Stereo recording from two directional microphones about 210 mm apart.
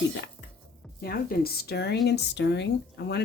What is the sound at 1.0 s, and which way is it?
Speech, 45° left (ahead or behind).